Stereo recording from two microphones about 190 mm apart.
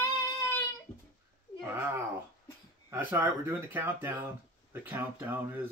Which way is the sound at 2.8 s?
10° right (ahead or behind).